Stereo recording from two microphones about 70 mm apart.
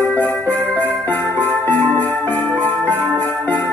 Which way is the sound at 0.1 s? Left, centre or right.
Left.